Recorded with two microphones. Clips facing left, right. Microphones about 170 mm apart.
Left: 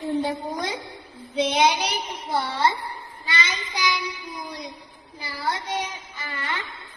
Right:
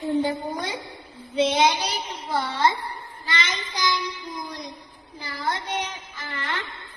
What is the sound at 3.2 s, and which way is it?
Child singing, 10° left (ahead or behind).